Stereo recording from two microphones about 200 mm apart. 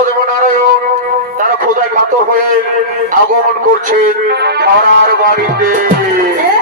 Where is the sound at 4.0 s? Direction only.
50° right (ahead or behind).